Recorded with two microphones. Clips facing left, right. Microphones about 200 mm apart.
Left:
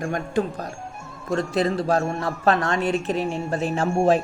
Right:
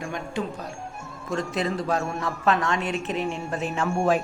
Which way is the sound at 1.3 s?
30° left (ahead or behind).